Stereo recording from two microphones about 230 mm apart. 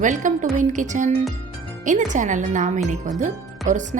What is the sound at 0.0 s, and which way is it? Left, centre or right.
Speech, right.